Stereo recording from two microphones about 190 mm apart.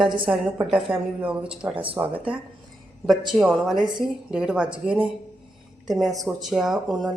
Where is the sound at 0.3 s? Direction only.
5° right (ahead or behind).